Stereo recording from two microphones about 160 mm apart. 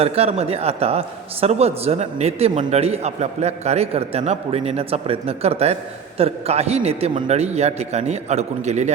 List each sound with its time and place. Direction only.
0.0 s a man's voice: 40° right (ahead or behind)